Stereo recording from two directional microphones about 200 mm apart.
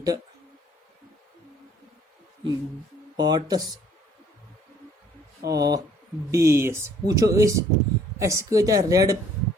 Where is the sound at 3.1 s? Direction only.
20° right (ahead or behind).